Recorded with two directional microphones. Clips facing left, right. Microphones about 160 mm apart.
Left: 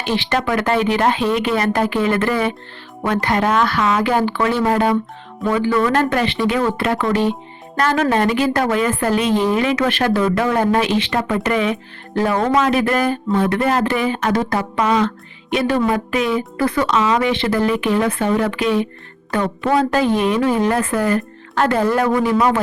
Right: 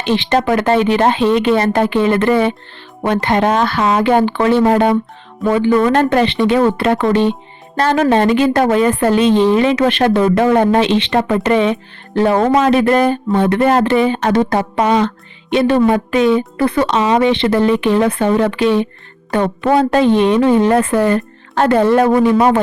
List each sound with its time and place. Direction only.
0.0 s speech: 20° right (ahead or behind)